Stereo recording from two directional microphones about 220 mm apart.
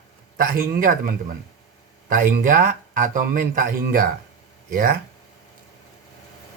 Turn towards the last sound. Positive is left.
turn(degrees=-40)  # may be behind; listen again after turning